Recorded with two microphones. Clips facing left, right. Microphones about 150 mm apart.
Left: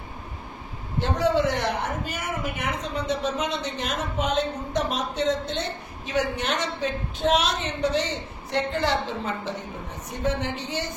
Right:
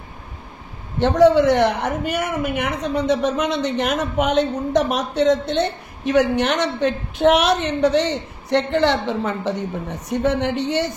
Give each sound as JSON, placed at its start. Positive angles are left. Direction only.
{"t": 0.9, "sound": "a man's voice", "side_deg": -70}